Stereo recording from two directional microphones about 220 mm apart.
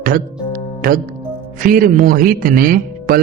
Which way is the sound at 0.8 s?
40° right (ahead or behind).